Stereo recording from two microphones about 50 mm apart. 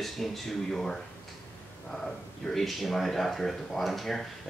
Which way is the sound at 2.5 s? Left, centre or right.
Centre.